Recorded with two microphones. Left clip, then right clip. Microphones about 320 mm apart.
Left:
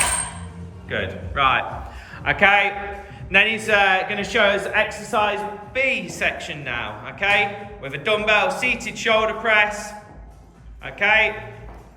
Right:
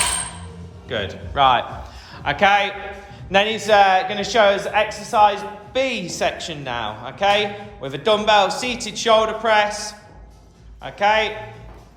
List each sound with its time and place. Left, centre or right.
0.9 s a man's voice: centre
10.9 s speech: centre